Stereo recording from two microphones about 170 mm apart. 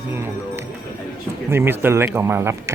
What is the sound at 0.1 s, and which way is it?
Speech, 15° right (ahead or behind).